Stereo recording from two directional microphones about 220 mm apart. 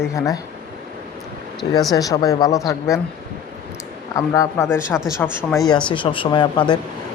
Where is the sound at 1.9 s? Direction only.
15° left (ahead or behind).